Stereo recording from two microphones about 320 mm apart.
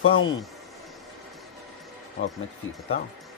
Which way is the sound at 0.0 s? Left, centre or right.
Left.